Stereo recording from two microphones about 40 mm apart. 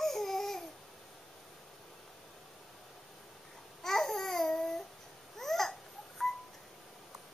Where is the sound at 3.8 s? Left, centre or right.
Centre.